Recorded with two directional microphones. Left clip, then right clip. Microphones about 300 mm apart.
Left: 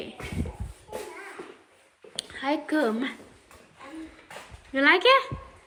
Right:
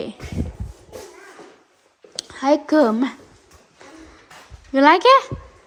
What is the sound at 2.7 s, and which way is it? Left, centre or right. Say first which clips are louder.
Speech: right 8 dB; centre.